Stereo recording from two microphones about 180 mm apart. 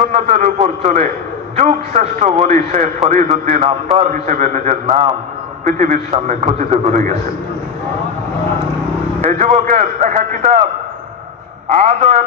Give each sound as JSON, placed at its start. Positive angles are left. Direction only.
{"t": 0.1, "sound": "a man's voice", "side_deg": -40}
{"t": 9.2, "sound": "a man's voice", "side_deg": -40}
{"t": 11.7, "sound": "a man's voice", "side_deg": -40}